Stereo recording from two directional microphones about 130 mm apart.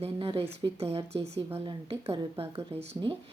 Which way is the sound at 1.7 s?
45° right (ahead or behind).